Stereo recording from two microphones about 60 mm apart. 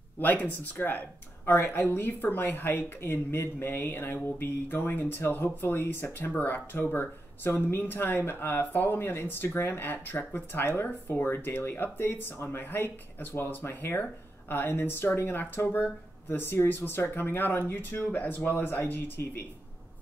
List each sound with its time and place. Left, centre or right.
0.2 s speech: left